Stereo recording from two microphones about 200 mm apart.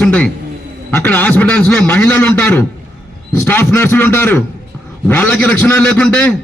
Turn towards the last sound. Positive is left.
turn(degrees=5)  # may be behind; listen again after turning